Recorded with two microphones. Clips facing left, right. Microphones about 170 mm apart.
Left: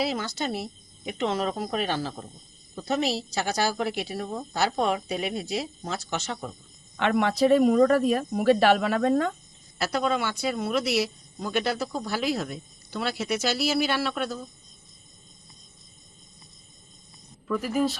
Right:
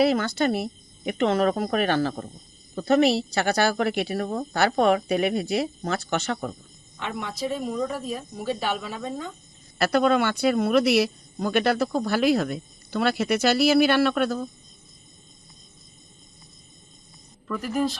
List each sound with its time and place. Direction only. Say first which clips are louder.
0.0 s speech: right 7 dB; 60° right (ahead or behind)
6.9 s speech: left 9 dB; 70° left (ahead or behind)
9.7 s speech: right 6 dB; 65° right (ahead or behind)
13.3 s speech: right 6 dB; 60° right (ahead or behind)
17.5 s speech: even; centre (ahead or behind)